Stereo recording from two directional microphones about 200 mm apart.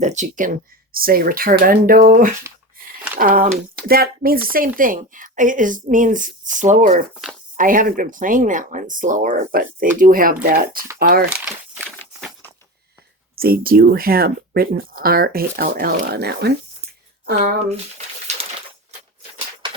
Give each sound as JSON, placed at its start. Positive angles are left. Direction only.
{"t": 0.0, "sound": "speech", "side_deg": -35}
{"t": 11.3, "sound": "speech", "side_deg": -5}
{"t": 11.8, "sound": "a sound", "side_deg": 5}
{"t": 13.3, "sound": "speech", "side_deg": -50}
{"t": 17.6, "sound": "speech", "side_deg": -30}